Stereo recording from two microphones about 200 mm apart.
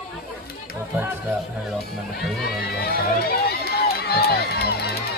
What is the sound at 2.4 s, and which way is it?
Run, 50° left (ahead or behind).